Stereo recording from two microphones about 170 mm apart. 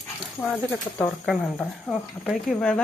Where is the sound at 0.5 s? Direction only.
10° left (ahead or behind).